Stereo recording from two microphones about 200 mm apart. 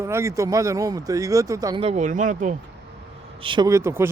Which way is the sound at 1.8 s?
35° right (ahead or behind).